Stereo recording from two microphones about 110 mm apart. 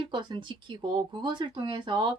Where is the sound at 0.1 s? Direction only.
45° right (ahead or behind).